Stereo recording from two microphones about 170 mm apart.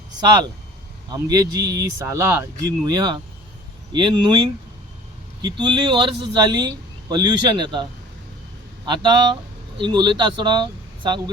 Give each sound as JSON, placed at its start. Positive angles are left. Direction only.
{"t": 0.2, "sound": "speech", "side_deg": -25}
{"t": 8.9, "sound": "speech", "side_deg": -25}